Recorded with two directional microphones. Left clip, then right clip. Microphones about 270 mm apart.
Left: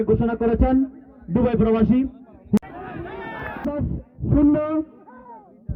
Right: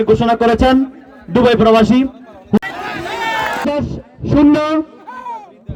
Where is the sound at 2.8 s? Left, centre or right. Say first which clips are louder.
Right 13 dB; right.